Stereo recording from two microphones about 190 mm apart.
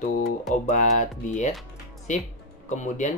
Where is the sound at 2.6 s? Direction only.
40° left (ahead or behind).